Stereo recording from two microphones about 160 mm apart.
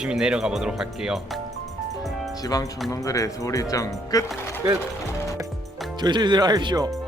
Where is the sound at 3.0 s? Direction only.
20° left (ahead or behind).